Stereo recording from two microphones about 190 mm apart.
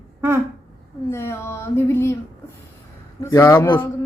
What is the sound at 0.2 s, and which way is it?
Speech, 15° right (ahead or behind).